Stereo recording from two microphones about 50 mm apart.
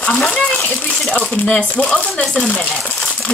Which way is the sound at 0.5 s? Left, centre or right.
Left.